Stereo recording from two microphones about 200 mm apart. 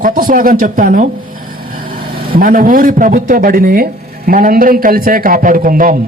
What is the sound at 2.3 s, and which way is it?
Speech, 45° right (ahead or behind).